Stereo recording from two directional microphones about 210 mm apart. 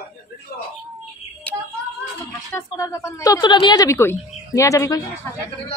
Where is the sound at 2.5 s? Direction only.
15° left (ahead or behind).